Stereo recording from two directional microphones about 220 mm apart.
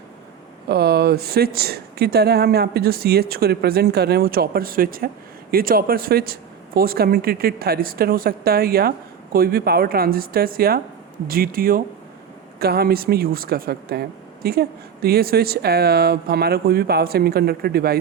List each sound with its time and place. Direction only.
0.7 s speech: 45° right (ahead or behind)